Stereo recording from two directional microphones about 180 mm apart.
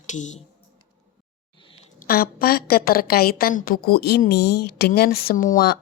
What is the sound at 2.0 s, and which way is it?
Speech, 55° left (ahead or behind).